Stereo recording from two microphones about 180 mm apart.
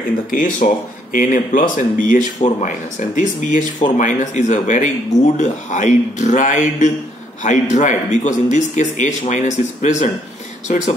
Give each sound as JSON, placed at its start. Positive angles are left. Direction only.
{"t": 0.3, "sound": "speech", "side_deg": 50}